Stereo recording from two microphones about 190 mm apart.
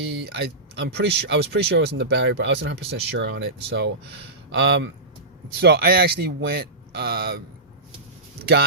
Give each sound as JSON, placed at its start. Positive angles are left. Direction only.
{"t": 0.1, "sound": "speech", "side_deg": -60}
{"t": 5.5, "sound": "speech", "side_deg": -55}